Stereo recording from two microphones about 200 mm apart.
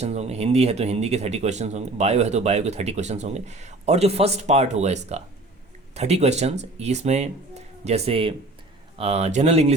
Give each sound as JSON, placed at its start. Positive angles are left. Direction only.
{"t": 0.0, "sound": "speech", "side_deg": -35}